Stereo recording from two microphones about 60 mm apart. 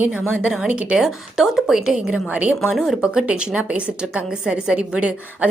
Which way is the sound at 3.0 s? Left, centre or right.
Centre.